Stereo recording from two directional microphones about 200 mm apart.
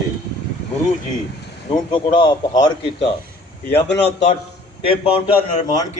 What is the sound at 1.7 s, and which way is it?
A man's voice, 20° left (ahead or behind).